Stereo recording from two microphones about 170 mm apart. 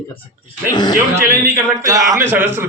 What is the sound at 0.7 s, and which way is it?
Speech, 25° left (ahead or behind).